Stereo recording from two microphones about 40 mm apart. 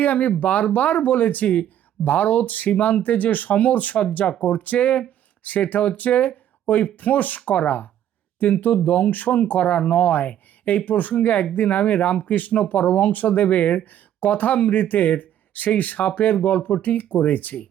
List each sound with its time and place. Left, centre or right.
0.0 s speech: left